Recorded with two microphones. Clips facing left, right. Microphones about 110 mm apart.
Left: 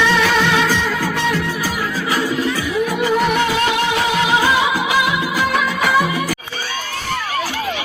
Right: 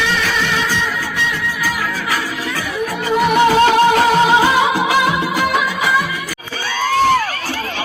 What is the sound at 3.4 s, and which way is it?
Music, 35° right (ahead or behind).